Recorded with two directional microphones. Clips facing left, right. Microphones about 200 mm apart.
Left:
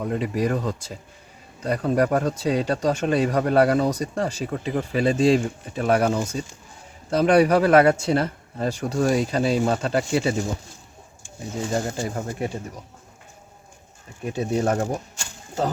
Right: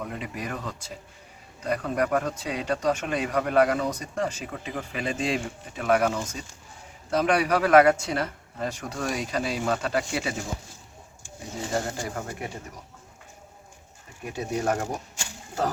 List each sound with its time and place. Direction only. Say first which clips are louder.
0.0 s speech: left 10 dB; 35° left (ahead or behind)
11.7 s speech: left 3 dB; 25° left (ahead or behind)
14.3 s speech: left 4 dB; 25° left (ahead or behind)